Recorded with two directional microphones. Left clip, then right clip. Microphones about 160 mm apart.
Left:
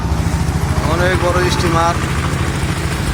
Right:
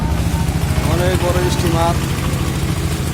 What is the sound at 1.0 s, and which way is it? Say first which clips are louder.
Speech: left 3 dB; 20° right (ahead or behind).